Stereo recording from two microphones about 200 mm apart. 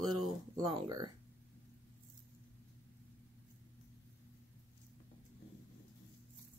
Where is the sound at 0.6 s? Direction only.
20° right (ahead or behind).